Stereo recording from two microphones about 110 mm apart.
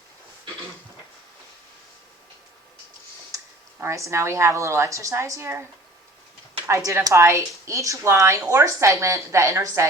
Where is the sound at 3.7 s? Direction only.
25° right (ahead or behind).